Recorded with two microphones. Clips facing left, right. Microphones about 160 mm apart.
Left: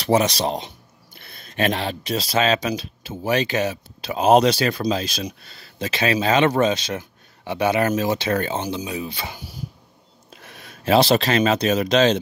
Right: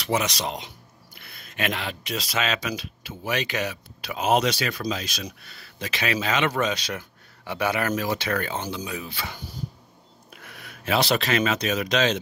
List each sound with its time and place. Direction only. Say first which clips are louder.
0.0 s speech: left 7 dB; 30° left (ahead or behind)